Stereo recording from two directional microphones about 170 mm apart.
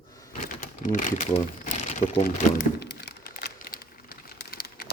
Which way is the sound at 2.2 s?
65° left (ahead or behind).